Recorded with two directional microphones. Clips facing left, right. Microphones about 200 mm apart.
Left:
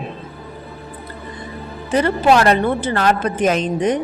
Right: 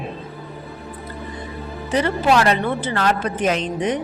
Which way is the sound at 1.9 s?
50° left (ahead or behind).